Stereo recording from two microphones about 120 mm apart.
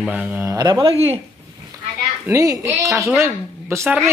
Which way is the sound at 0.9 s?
55° right (ahead or behind).